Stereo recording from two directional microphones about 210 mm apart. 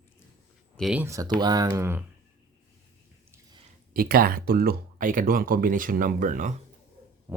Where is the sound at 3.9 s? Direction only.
45° right (ahead or behind).